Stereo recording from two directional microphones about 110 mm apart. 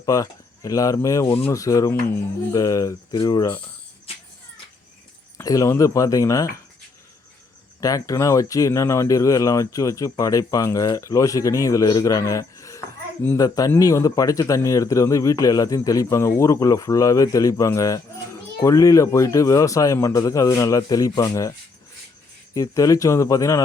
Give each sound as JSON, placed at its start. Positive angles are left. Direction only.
{"t": 0.0, "sound": "speech", "side_deg": 30}
{"t": 5.4, "sound": "speech", "side_deg": 30}
{"t": 7.8, "sound": "speech", "side_deg": 30}
{"t": 22.5, "sound": "speech", "side_deg": 30}